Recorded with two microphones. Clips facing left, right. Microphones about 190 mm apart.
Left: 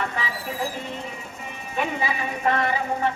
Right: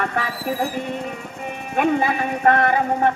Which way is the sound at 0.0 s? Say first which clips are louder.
Right 5 dB; 55° right (ahead or behind).